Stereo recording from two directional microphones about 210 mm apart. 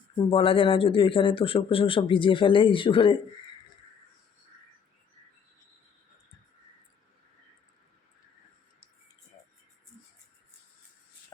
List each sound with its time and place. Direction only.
0.2 s speech: 25° left (ahead or behind)